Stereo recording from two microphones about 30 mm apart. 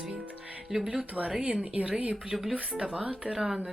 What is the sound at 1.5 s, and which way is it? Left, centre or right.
Speech, right.